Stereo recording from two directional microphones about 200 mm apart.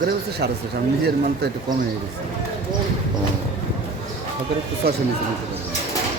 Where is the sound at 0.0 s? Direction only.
55° right (ahead or behind).